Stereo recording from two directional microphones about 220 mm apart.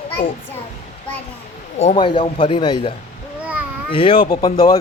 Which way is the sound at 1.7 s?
25° left (ahead or behind).